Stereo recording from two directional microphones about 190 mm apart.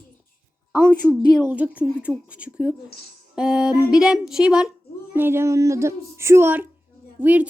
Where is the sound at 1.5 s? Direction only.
10° right (ahead or behind).